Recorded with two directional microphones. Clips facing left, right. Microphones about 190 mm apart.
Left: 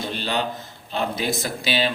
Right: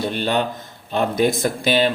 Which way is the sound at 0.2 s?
50° right (ahead or behind).